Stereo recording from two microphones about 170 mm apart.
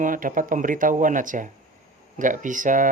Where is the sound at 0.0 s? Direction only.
50° right (ahead or behind).